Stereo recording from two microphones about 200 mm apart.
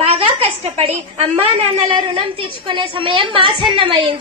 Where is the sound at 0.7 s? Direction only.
30° right (ahead or behind).